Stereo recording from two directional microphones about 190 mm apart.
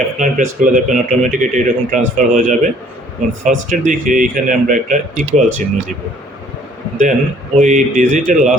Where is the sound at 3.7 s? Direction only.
40° right (ahead or behind).